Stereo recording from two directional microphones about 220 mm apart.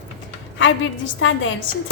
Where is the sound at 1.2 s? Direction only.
60° left (ahead or behind).